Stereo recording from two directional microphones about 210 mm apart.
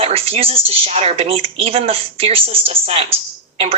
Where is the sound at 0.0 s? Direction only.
30° right (ahead or behind).